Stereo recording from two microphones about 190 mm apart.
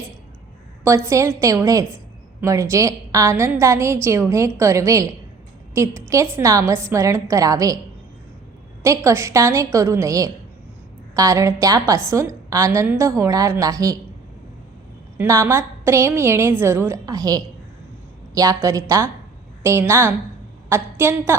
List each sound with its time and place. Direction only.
0.9 s a woman's voice: 15° right (ahead or behind)
8.8 s a woman's voice: 15° right (ahead or behind)
15.2 s a woman's voice: 15° right (ahead or behind)